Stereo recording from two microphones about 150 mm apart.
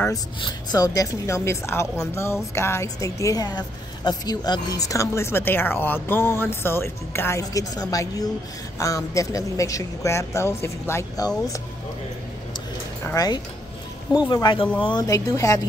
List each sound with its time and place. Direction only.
0.1 s a woman's voice: 30° left (ahead or behind)
13.0 s a woman's voice: 25° left (ahead or behind)